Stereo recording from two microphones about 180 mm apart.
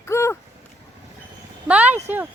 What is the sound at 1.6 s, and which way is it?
Speech, 5° right (ahead or behind).